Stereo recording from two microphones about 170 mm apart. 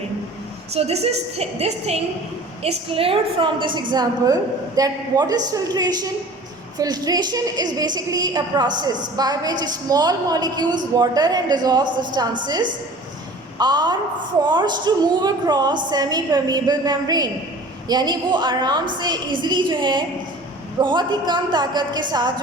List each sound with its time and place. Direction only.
0.7 s a woman's voice: 35° right (ahead or behind)
13.6 s a woman's voice: 25° right (ahead or behind)